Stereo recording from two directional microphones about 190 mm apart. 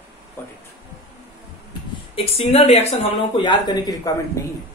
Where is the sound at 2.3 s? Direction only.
35° left (ahead or behind).